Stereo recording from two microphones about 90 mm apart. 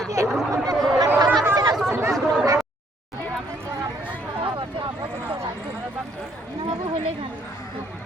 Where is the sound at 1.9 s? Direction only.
30° right (ahead or behind).